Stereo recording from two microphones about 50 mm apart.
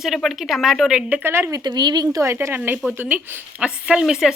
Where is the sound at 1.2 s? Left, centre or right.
Right.